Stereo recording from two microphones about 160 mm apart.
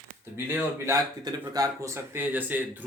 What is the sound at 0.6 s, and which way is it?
Speech, 15° right (ahead or behind).